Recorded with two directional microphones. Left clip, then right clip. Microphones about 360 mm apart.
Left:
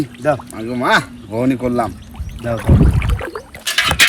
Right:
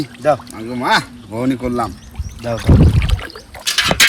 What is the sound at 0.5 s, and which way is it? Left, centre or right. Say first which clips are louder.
Speech: left 1 dB; centre.